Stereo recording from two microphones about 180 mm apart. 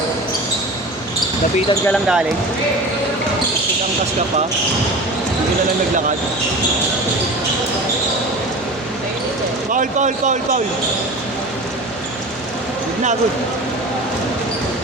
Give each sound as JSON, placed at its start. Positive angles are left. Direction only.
{"t": 1.9, "sound": "speech", "side_deg": -5}
{"t": 9.7, "sound": "speech", "side_deg": -45}